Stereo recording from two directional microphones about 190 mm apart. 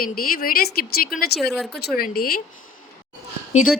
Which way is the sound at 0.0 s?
50° left (ahead or behind).